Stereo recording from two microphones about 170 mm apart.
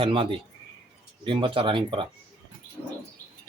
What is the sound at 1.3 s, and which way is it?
Speech, 30° right (ahead or behind).